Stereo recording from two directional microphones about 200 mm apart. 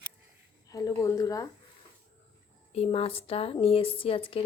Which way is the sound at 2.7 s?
30° left (ahead or behind).